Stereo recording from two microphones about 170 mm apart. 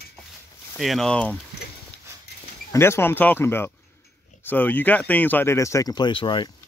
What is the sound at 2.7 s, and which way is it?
Speech, 15° left (ahead or behind).